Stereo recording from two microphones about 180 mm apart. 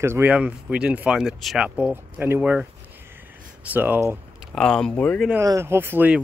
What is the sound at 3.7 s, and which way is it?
Speech, 10° right (ahead or behind).